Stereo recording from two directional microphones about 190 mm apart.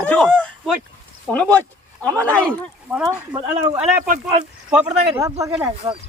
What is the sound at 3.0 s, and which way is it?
Speech, 20° right (ahead or behind).